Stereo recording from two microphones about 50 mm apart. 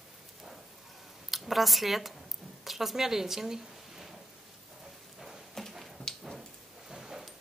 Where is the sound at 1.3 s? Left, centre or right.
Centre.